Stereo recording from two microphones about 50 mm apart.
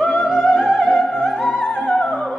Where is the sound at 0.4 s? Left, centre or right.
Left.